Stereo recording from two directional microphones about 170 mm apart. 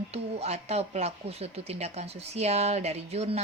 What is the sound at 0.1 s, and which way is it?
Speech, 40° right (ahead or behind).